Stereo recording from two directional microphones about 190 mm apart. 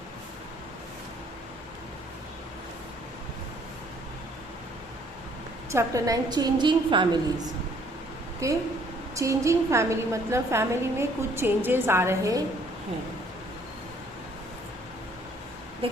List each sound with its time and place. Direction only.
5.7 s a woman's voice: 15° right (ahead or behind)
8.4 s a woman's voice: 15° right (ahead or behind)